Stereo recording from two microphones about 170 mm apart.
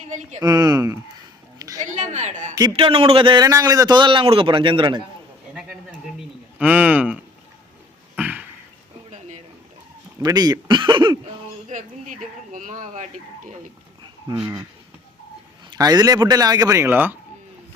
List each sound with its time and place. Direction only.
0.4 s a man's voice: 25° right (ahead or behind)
1.5 s a sound: 20° right (ahead or behind)
1.8 s speech: 45° right (ahead or behind)
2.6 s a man's voice: 30° right (ahead or behind)
6.6 s speech: 10° right (ahead or behind)
8.1 s a sound: 10° right (ahead or behind)
10.2 s a man's voice: 20° right (ahead or behind)
11.7 s speech: 50° right (ahead or behind)
14.3 s a man's voice: 25° right (ahead or behind)
15.7 s a man's voice: 25° right (ahead or behind)